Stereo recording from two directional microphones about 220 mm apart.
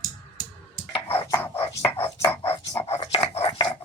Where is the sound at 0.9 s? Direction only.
25° left (ahead or behind).